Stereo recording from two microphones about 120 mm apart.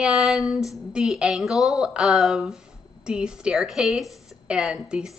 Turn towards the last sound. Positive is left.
turn(degrees=-5)  # may be behind; listen again after turning